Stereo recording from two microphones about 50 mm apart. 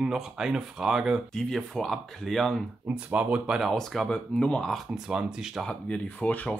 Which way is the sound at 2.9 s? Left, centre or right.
Right.